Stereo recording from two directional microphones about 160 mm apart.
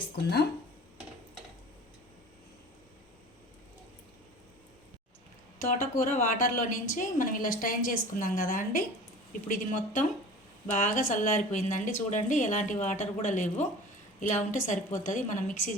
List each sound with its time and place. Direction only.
0.2 s speech: 90° left
5.5 s a woman's voice: 55° left (ahead or behind)